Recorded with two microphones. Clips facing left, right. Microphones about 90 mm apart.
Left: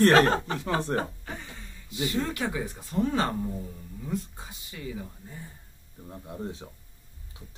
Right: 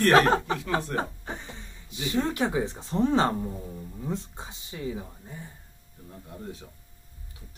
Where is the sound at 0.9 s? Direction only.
20° right (ahead or behind).